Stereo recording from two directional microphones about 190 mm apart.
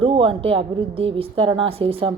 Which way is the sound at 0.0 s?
25° right (ahead or behind).